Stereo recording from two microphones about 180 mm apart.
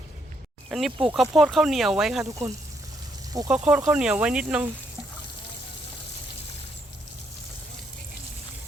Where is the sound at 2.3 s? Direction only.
20° right (ahead or behind).